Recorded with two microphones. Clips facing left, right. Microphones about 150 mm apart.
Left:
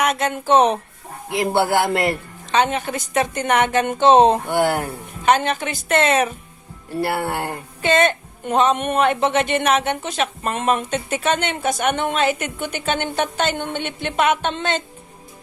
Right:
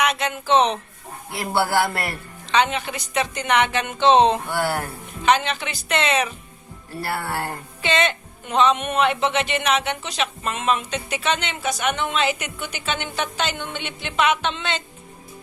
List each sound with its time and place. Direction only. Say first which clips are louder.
0.0 s speech: left 3 dB; 45° left (ahead or behind)
1.3 s a man's voice: left 4 dB; 20° left (ahead or behind)
2.5 s speech: left 2 dB; 45° left (ahead or behind)
4.4 s a man's voice: left 5 dB; 20° left (ahead or behind)
5.2 s speech: left 2 dB; 50° left (ahead or behind)
7.0 s speech: left 4 dB; 20° left (ahead or behind)
7.8 s speech: left 5 dB; 50° left (ahead or behind)